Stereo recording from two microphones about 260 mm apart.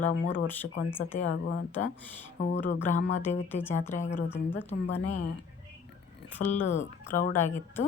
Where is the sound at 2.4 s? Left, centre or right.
Left.